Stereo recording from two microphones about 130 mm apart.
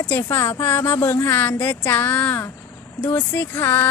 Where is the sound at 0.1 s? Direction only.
15° left (ahead or behind).